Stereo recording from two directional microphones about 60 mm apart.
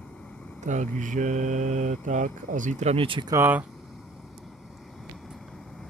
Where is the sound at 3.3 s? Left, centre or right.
Right.